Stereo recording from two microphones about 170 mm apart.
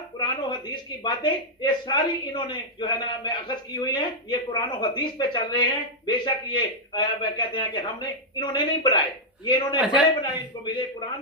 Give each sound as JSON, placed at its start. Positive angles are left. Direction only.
{"t": 0.2, "sound": "speech", "side_deg": 25}